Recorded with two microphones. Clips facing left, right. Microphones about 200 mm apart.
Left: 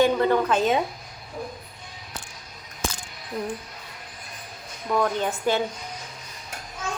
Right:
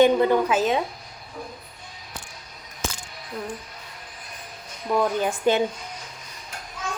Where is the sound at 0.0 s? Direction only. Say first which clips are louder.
Right 3 dB; 15° right (ahead or behind).